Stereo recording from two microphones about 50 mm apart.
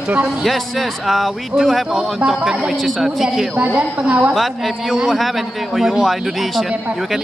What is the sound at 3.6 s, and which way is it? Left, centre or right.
Speech, right.